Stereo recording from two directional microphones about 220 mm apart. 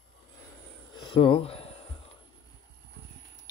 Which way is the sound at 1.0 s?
25° left (ahead or behind).